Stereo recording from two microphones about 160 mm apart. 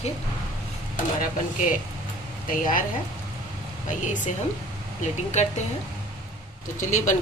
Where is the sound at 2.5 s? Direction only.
55° left (ahead or behind).